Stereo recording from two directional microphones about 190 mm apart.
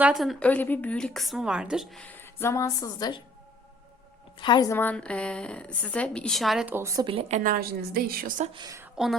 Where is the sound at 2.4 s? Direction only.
15° left (ahead or behind).